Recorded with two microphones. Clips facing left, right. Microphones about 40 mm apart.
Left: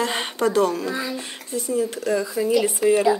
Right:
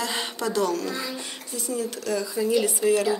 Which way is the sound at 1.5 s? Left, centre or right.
Left.